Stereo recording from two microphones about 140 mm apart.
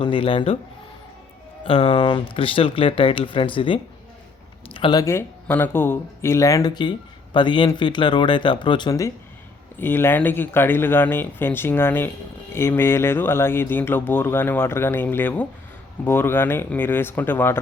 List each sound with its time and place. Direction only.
0.0 s speech: 40° left (ahead or behind)
1.6 s speech: 40° left (ahead or behind)
4.7 s a sound: 40° left (ahead or behind)
4.9 s speech: 20° left (ahead or behind)